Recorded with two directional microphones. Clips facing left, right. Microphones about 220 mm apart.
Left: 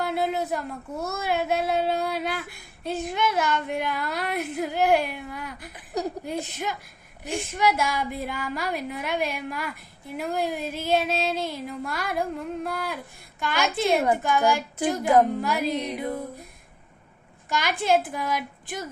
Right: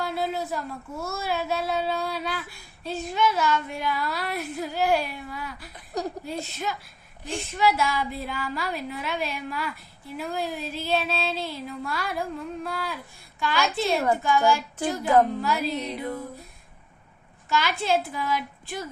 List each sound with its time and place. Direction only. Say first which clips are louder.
0.0 s child singing: left 2 dB; 20° left (ahead or behind)
1.9 s female singing: left 2 dB; 20° left (ahead or behind)
3.2 s a woman's voice: right 2 dB; 20° left (ahead or behind)
3.8 s female singing: left 1 dB; 20° left (ahead or behind)
4.5 s female singing: left 3 dB; 55° left (ahead or behind)
4.8 s female singing: left 2 dB; 20° left (ahead or behind)
5.1 s a woman's voice: left 1 dB; 20° left (ahead or behind)
10.2 s a woman's voice: left 3 dB; 15° left (ahead or behind)
17.5 s a woman's voice: left 1 dB; 15° left (ahead or behind)